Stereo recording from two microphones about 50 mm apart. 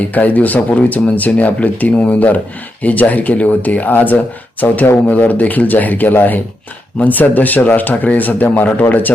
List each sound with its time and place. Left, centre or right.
0.0 s speech: left